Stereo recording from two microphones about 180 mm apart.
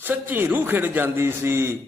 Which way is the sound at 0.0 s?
10° right (ahead or behind).